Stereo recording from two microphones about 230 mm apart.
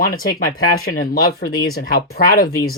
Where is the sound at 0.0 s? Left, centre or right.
Left.